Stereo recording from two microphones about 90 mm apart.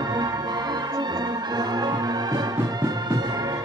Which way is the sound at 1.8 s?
50° right (ahead or behind).